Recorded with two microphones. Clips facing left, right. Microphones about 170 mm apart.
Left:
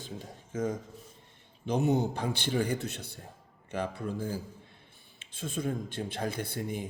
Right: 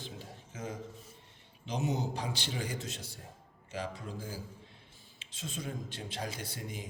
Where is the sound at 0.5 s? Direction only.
50° left (ahead or behind).